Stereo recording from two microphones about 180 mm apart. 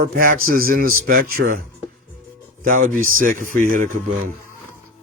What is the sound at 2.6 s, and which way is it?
Speech, 50° right (ahead or behind).